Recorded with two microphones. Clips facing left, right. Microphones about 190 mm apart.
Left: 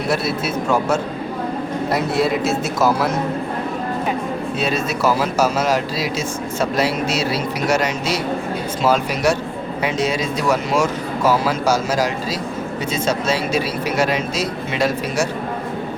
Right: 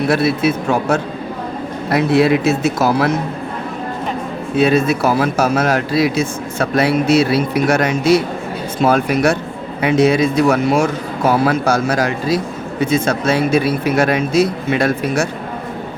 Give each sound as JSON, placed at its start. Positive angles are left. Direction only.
{"t": 0.1, "sound": "speech", "side_deg": -60}
{"t": 4.5, "sound": "speech", "side_deg": -60}